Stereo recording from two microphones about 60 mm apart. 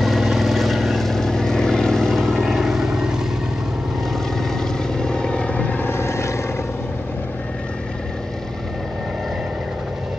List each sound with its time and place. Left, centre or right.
0.0 s vehicle: centre
4.9 s vehicle: centre
5.9 s vehicle: left